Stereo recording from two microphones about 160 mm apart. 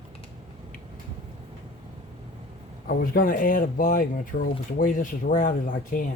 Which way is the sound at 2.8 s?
60° left (ahead or behind).